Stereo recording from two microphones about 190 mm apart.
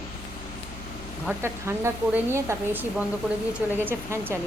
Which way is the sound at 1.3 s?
15° right (ahead or behind).